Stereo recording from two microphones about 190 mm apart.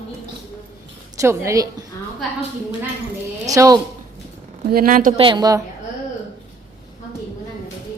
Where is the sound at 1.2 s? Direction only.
15° right (ahead or behind).